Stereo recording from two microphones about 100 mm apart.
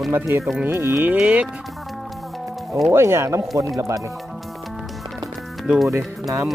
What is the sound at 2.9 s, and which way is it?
Speech, 30° right (ahead or behind).